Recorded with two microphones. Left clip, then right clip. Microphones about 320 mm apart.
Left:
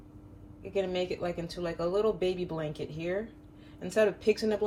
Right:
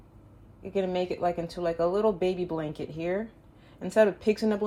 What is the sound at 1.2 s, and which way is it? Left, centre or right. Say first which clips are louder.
Speech: right 6 dB; right.